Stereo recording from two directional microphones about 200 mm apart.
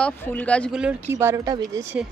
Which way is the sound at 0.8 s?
10° right (ahead or behind).